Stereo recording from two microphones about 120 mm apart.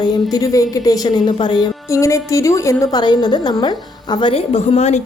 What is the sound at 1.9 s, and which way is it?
A woman's voice, 25° left (ahead or behind).